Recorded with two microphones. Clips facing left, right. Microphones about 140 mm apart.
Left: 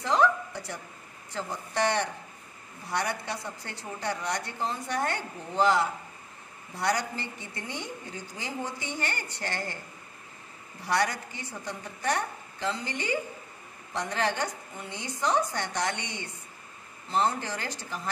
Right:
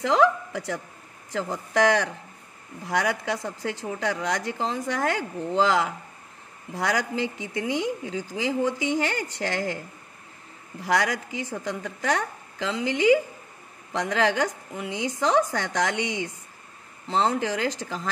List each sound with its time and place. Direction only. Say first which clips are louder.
0.0 s a woman's voice: right 4 dB; 90° right
10.8 s a woman's voice: right 3 dB; 90° right